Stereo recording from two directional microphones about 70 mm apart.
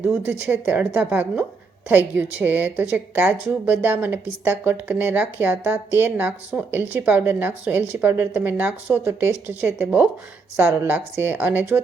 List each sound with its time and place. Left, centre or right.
0.0 s speech: right